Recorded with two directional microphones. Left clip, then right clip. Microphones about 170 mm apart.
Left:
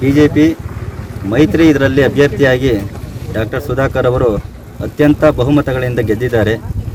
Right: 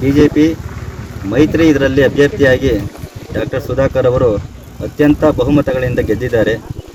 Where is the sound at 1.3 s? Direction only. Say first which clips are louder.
Left 1 dB; centre (ahead or behind).